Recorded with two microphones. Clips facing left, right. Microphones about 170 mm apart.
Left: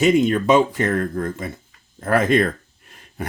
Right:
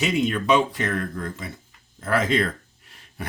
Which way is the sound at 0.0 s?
45° left (ahead or behind).